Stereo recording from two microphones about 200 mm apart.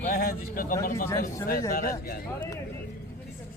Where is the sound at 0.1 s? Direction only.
45° left (ahead or behind).